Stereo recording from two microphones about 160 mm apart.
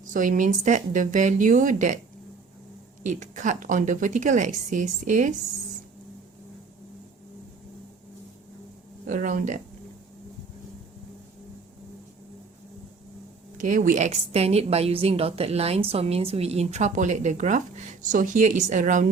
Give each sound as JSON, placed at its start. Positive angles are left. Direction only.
{"t": 0.0, "sound": "a woman's voice", "side_deg": -55}
{"t": 3.0, "sound": "a woman's voice", "side_deg": -50}
{"t": 9.0, "sound": "a woman's voice", "side_deg": -50}
{"t": 13.6, "sound": "a woman's voice", "side_deg": -55}